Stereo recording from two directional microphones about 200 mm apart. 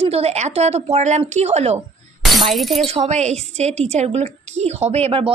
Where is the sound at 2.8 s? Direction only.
30° right (ahead or behind).